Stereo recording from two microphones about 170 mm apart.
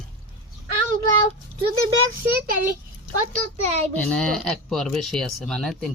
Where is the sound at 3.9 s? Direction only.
5° left (ahead or behind).